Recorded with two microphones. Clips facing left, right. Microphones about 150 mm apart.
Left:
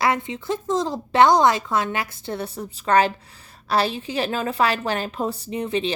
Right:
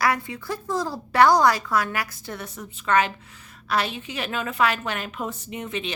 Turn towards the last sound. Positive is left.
turn(degrees=30)  # may be behind; listen again after turning